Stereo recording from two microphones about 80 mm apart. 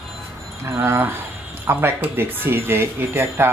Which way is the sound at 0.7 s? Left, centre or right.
Right.